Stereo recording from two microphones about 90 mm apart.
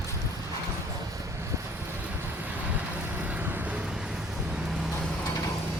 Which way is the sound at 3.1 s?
15° right (ahead or behind).